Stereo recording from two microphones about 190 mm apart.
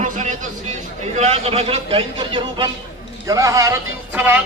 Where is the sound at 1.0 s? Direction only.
35° right (ahead or behind).